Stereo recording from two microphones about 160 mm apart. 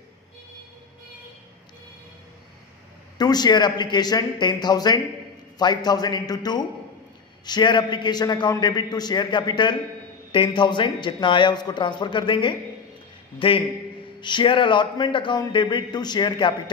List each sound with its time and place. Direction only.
3.2 s a man's voice: 25° left (ahead or behind)